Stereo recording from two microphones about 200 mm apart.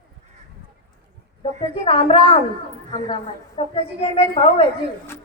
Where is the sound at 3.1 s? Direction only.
30° left (ahead or behind).